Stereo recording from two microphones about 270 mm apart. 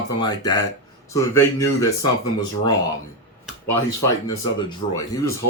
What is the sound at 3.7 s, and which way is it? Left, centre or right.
Speech, centre.